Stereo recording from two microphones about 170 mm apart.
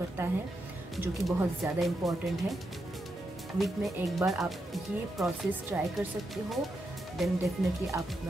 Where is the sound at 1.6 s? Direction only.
Centre (ahead or behind).